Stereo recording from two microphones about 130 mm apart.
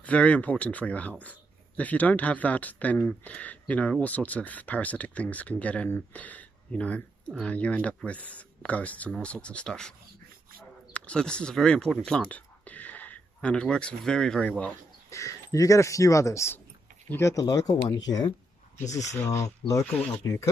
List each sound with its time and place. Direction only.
0.0 s speech: 10° left (ahead or behind)
15.0 s speech: 25° left (ahead or behind)
19.8 s speech: 10° left (ahead or behind)